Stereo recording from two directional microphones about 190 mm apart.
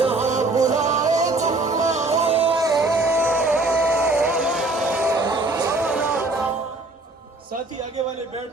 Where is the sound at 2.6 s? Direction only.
15° right (ahead or behind).